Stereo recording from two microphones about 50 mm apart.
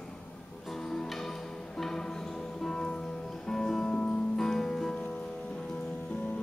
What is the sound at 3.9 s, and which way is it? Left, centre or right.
Music, centre.